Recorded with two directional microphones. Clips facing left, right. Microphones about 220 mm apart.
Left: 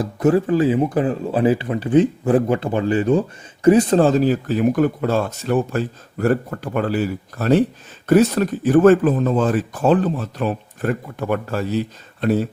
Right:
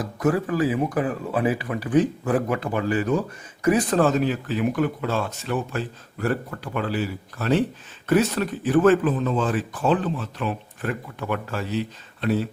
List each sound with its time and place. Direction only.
0.0 s speech: 30° left (ahead or behind); by 12.5 s 45° left (ahead or behind)